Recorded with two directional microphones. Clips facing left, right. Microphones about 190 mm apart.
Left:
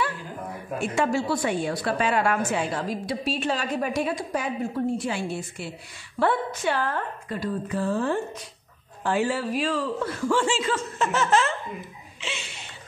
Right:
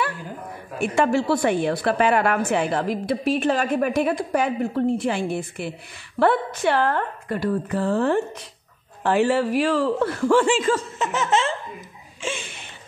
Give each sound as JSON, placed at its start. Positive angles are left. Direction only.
{"t": 0.7, "sound": "a woman's voice", "side_deg": -60}
{"t": 11.0, "sound": "laughter", "side_deg": -20}
{"t": 12.2, "sound": "a sound", "side_deg": -50}